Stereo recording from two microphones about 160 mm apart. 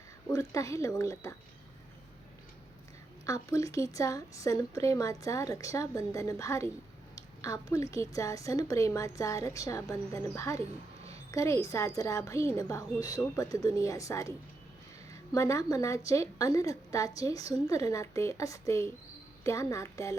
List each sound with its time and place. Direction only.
0.3 s speech: 20° left (ahead or behind)
3.2 s speech: 20° left (ahead or behind)